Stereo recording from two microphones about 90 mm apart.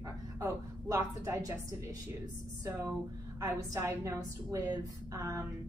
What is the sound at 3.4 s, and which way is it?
A woman's voice, 35° right (ahead or behind).